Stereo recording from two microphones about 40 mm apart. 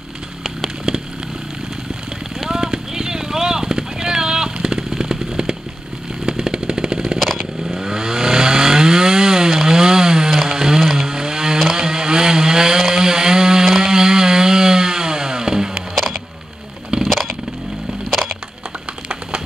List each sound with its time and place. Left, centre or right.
2.3 s clip-clop: centre
6.2 s a sound: centre
7.2 s vehicle: centre
7.7 s chainsaw: centre
11.7 s vehicle: centre
13.7 s chainsaw: centre
17.0 s vehicle: centre